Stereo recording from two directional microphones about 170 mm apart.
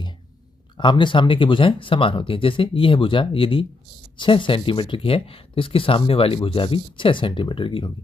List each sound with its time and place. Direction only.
0.7 s speech: 30° left (ahead or behind)